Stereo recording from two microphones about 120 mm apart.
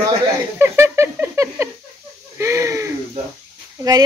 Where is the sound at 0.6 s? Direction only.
20° right (ahead or behind).